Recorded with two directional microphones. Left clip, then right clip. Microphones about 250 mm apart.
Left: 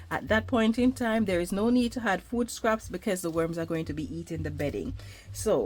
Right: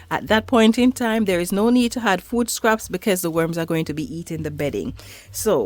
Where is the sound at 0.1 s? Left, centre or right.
Right.